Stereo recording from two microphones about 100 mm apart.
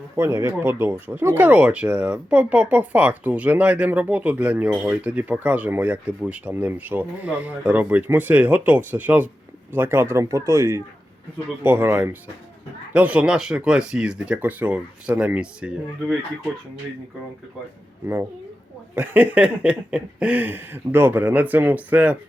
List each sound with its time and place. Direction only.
0.2 s speech: 25° right (ahead or behind); by 16.1 s 10° right (ahead or behind)
18.9 s speech: 15° right (ahead or behind)